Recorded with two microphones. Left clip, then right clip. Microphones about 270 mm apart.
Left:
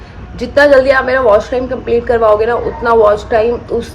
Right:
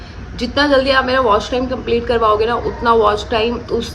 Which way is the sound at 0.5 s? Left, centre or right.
Centre.